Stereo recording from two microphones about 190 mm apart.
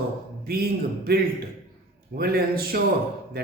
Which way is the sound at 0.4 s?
55° right (ahead or behind).